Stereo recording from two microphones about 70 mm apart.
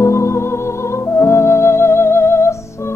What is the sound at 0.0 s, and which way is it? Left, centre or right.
Music, left.